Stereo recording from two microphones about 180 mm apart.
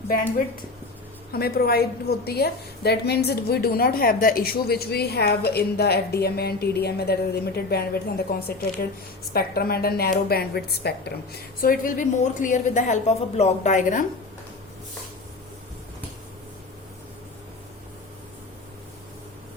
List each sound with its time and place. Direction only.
1.3 s a woman's voice: 60° left (ahead or behind)
11.6 s a woman's voice: 50° left (ahead or behind)